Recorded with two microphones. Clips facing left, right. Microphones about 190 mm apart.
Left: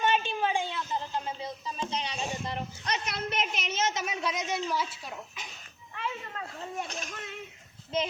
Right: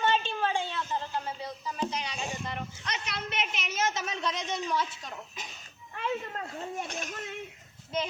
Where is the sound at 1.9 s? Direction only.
30° left (ahead or behind).